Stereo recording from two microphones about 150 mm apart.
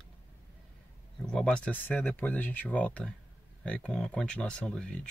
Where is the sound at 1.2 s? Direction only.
5° left (ahead or behind).